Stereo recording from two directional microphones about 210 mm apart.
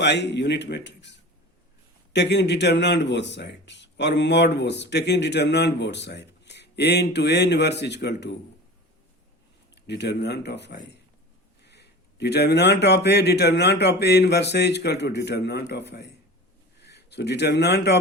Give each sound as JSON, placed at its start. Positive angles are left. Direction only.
{"t": 0.0, "sound": "a man's voice", "side_deg": 55}
{"t": 9.8, "sound": "a man's voice", "side_deg": 55}